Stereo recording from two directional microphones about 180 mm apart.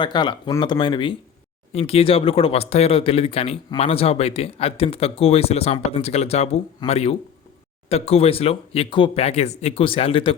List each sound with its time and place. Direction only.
0.0 s speech: 25° left (ahead or behind)